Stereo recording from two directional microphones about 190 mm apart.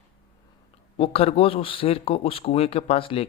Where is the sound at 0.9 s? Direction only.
30° left (ahead or behind).